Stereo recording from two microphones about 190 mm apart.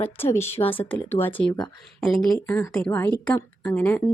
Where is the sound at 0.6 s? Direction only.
30° left (ahead or behind).